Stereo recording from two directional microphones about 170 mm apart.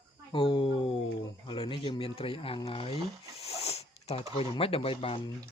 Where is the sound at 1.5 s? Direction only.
30° left (ahead or behind).